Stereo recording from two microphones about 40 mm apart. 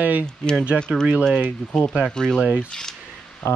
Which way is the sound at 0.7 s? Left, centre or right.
Centre.